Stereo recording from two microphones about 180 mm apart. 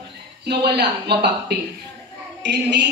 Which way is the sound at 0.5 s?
65° right (ahead or behind).